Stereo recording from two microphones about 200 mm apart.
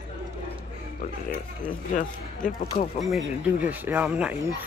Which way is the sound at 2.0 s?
40° left (ahead or behind).